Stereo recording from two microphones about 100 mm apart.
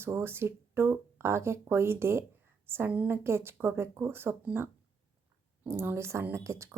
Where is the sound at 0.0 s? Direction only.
25° right (ahead or behind).